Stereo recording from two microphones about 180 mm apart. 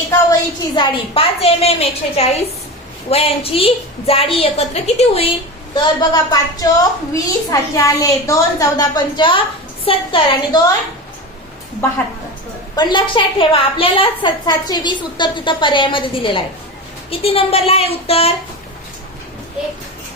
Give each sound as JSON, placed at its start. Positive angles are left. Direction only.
{"t": 0.8, "sound": "a woman's voice", "side_deg": 30}
{"t": 5.7, "sound": "a woman's voice", "side_deg": 20}
{"t": 12.7, "sound": "a woman's voice", "side_deg": 25}